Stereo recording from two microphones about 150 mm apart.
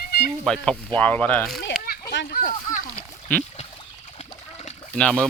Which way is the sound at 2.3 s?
70° left (ahead or behind).